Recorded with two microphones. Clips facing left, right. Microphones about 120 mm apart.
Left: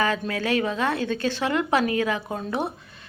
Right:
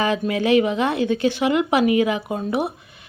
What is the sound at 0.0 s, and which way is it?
Speech, 20° right (ahead or behind).